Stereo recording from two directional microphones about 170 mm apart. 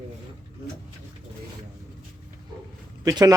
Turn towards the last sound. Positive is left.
turn(degrees=-20)  # may be behind; listen again after turning